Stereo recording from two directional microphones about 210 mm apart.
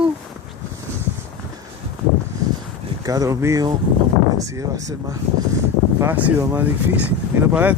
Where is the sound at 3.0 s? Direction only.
15° right (ahead or behind).